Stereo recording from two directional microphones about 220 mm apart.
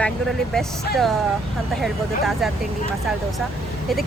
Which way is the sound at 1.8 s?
Centre (ahead or behind).